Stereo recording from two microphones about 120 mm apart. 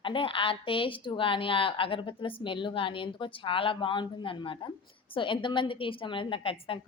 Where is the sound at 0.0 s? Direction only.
45° left (ahead or behind).